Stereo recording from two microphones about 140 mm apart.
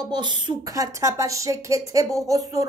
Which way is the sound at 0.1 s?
35° right (ahead or behind).